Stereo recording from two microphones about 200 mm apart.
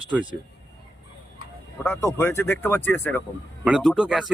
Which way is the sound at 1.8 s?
10° left (ahead or behind).